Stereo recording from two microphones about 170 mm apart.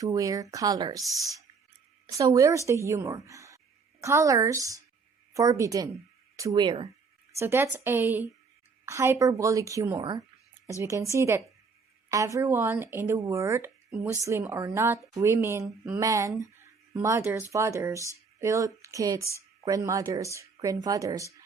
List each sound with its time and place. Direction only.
0.0 s speech: 20° right (ahead or behind)
2.0 s speech: 20° right (ahead or behind)
7.3 s speech: 15° right (ahead or behind)